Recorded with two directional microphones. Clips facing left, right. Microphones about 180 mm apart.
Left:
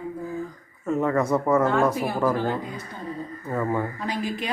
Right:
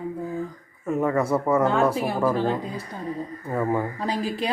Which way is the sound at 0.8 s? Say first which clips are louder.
Even; 10° right (ahead or behind).